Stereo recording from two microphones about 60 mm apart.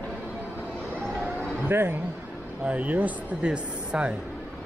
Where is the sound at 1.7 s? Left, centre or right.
Right.